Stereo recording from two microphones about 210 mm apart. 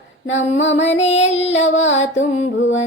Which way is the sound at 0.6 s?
60° left (ahead or behind).